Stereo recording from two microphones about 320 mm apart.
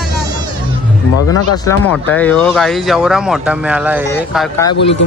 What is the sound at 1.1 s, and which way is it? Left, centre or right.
Speech, left.